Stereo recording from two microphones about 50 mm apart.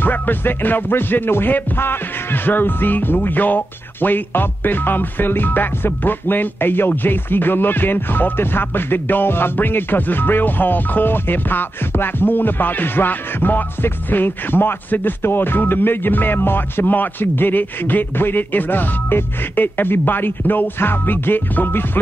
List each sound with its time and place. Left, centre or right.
0.0 s music: left